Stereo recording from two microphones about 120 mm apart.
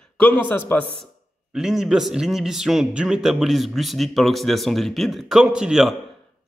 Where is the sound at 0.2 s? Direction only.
15° left (ahead or behind).